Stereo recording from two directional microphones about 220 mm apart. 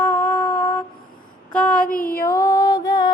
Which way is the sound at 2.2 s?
15° left (ahead or behind).